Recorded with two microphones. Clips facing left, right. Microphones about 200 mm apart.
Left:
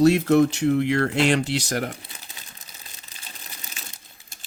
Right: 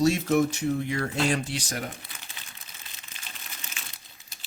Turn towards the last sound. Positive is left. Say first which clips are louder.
# left 2 dB
turn(degrees=50)  # may be behind; listen again after turning